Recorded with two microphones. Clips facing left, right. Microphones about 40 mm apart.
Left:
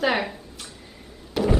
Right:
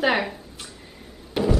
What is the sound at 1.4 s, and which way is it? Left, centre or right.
Music, centre.